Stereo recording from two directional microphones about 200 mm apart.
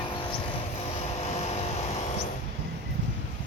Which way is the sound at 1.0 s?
30° left (ahead or behind).